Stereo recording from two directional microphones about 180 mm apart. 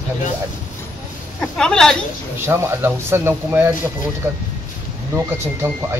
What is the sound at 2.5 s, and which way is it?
Speech, 15° right (ahead or behind).